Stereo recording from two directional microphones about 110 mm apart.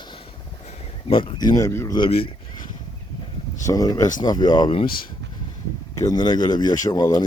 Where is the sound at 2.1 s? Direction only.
60° left (ahead or behind).